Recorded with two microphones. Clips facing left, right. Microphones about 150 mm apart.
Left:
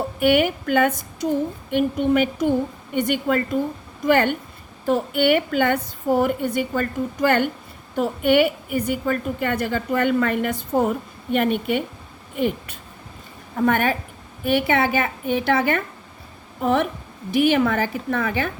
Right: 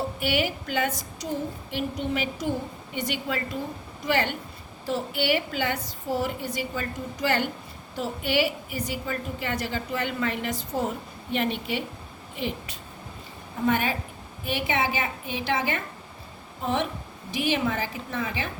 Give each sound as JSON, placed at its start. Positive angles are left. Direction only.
{"t": 0.2, "sound": "a woman's voice", "side_deg": 55}